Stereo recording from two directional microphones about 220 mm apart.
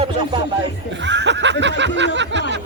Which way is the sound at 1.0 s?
55° right (ahead or behind).